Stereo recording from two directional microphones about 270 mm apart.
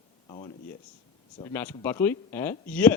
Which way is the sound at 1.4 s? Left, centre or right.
Centre.